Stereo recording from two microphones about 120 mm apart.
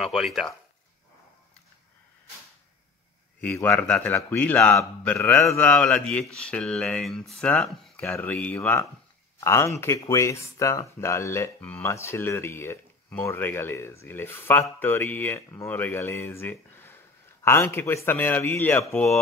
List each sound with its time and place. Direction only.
0.0 s speech: centre (ahead or behind)
3.6 s a man's voice: 10° left (ahead or behind)
8.1 s a man's voice: 15° left (ahead or behind)